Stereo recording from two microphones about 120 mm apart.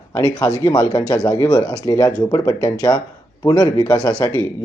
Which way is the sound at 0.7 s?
35° left (ahead or behind).